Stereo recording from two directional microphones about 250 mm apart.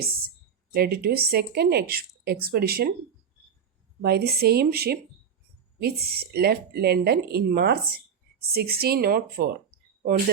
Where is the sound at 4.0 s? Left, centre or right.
Right.